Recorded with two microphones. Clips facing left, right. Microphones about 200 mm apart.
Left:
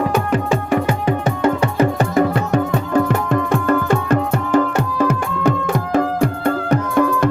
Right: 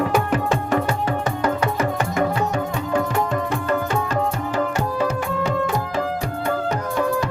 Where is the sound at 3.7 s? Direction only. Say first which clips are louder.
Left 7 dB; 50° left (ahead or behind).